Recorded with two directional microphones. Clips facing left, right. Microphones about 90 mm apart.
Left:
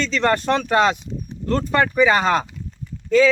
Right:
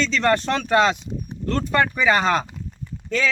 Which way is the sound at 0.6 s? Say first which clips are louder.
Even; 25° left (ahead or behind).